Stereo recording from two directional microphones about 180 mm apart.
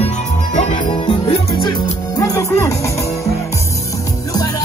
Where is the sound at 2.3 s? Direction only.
15° left (ahead or behind).